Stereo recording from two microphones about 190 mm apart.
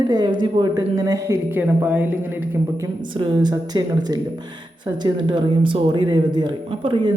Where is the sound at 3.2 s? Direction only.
25° right (ahead or behind).